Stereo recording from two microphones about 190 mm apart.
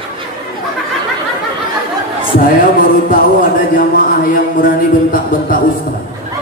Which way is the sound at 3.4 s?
50° left (ahead or behind).